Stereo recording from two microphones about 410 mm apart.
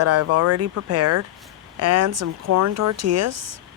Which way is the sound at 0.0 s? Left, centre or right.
Right.